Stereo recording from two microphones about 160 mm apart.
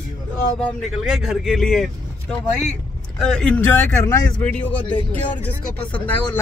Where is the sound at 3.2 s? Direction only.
5° left (ahead or behind).